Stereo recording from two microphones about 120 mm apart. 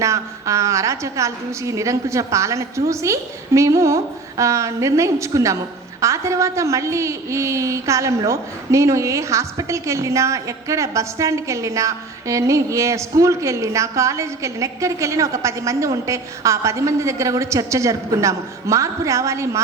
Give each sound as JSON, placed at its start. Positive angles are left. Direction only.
{"t": 0.0, "sound": "a woman's voice", "side_deg": -25}